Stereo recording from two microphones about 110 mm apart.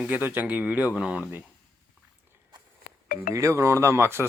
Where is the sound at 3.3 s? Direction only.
30° right (ahead or behind).